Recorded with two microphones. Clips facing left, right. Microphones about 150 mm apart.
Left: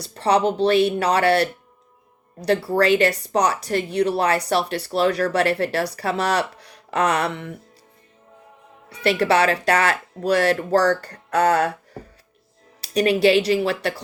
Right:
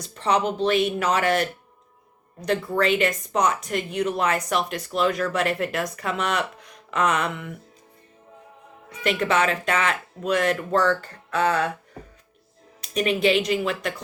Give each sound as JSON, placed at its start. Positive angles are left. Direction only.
{"t": 0.0, "sound": "speech", "side_deg": 35}
{"t": 8.9, "sound": "speech", "side_deg": 35}